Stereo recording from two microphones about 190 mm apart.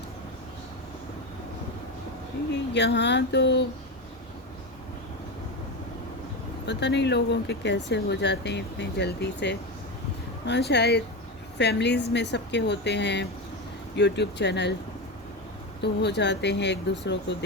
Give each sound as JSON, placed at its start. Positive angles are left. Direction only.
{"t": 2.7, "sound": "a woman's voice", "side_deg": 65}
{"t": 6.7, "sound": "a woman's voice", "side_deg": 65}
{"t": 15.8, "sound": "a woman's voice", "side_deg": 65}